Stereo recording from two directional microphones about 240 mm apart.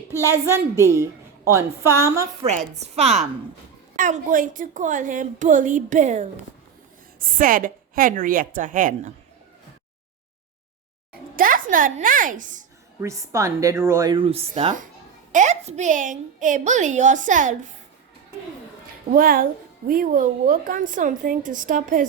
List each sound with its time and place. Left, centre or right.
0.1 s speech: centre
2.4 s a woman's voice: right
7.3 s a woman's voice: right
11.3 s a woman's voice: right
13.0 s a woman's voice: centre; by 17.7 s right
19.1 s a woman's voice: right